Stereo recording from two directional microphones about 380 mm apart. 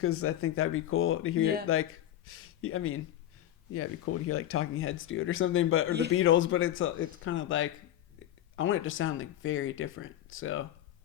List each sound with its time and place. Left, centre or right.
0.0 s speech: left